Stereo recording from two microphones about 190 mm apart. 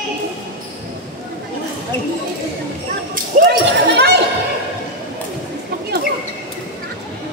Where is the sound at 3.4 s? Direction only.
60° right (ahead or behind).